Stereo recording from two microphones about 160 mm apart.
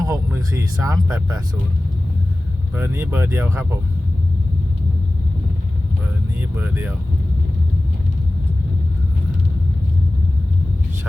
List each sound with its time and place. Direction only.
0.0 s a sound: 20° right (ahead or behind)
2.7 s speech: 15° right (ahead or behind)
6.6 s speech: 10° right (ahead or behind)